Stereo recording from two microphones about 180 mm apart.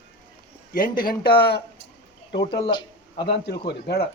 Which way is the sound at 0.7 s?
50° left (ahead or behind).